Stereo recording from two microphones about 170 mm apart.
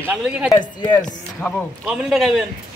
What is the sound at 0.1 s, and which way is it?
A man's voice, 5° right (ahead or behind).